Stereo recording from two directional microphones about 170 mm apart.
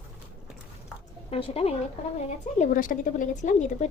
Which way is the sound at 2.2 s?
45° left (ahead or behind).